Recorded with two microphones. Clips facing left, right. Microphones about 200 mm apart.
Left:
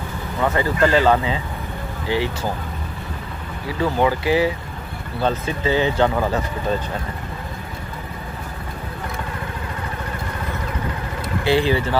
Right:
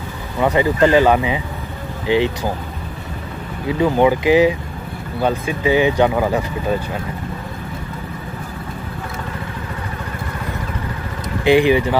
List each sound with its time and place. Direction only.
0.4 s speech: 15° right (ahead or behind)
3.6 s speech: 15° right (ahead or behind)
11.4 s speech: 15° right (ahead or behind)